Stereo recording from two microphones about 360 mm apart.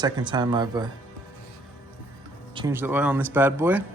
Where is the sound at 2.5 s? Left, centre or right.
Centre.